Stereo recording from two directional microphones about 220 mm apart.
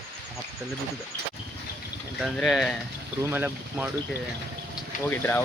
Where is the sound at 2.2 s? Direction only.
Centre (ahead or behind).